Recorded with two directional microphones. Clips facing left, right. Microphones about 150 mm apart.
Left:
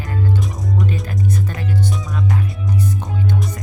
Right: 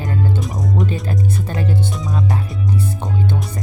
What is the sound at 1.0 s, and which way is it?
Music, 30° right (ahead or behind).